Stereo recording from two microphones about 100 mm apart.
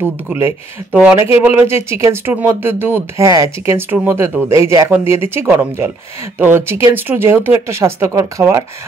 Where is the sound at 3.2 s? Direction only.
35° right (ahead or behind).